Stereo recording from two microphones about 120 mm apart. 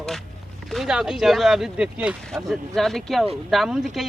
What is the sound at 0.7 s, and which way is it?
Speech, 5° right (ahead or behind).